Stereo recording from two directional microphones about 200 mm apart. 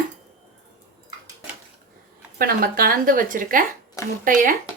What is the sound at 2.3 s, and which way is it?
A woman's voice, 45° right (ahead or behind).